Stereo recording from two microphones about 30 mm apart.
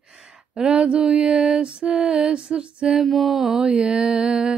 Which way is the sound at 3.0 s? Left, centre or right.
Centre.